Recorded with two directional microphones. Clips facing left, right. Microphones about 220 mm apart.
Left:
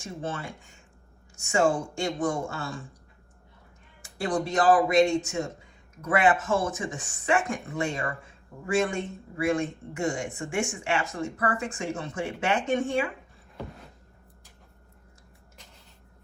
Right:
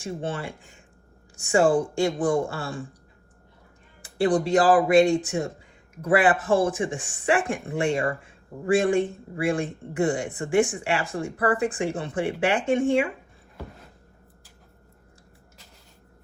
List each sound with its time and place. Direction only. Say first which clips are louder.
0.0 s speech: right 4 dB; 30° right (ahead or behind)
4.0 s speech: right 6 dB; 30° right (ahead or behind)